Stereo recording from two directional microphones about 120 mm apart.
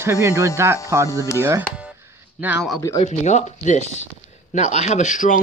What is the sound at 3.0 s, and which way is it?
Speech, 75° left (ahead or behind).